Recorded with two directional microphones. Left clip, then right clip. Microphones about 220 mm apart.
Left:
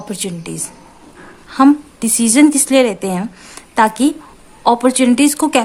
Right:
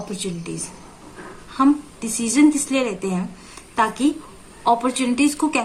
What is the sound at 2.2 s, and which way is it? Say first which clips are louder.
A woman's voice: left 5 dB; 50° left (ahead or behind).